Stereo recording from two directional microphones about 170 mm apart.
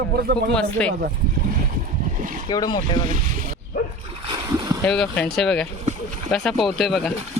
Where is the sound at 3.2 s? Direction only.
60° right (ahead or behind).